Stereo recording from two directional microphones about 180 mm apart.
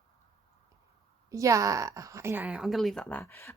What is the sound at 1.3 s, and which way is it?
A woman's voice, 15° right (ahead or behind).